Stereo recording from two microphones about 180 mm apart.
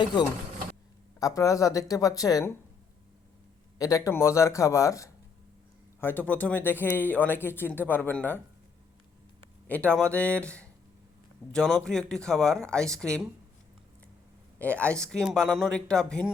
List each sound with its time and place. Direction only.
0.0 s speech: 25° left (ahead or behind)
3.8 s speech: 20° left (ahead or behind)
9.6 s speech: 10° left (ahead or behind)
14.6 s speech: 5° left (ahead or behind)